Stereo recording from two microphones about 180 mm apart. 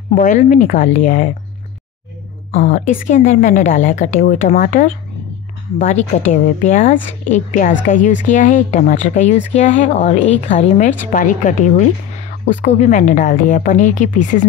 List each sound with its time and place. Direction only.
0.1 s a woman's voice: 50° left (ahead or behind)
2.5 s a woman's voice: 40° left (ahead or behind)